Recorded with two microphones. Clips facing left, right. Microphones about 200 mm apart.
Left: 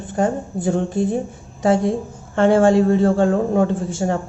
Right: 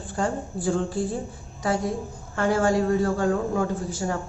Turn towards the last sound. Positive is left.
turn(degrees=25)  # may be behind; listen again after turning